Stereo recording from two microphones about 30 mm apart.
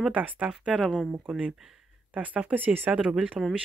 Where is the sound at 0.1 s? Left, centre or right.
Right.